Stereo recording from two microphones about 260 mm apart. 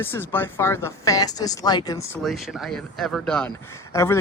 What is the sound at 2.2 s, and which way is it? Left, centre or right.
Speech, centre.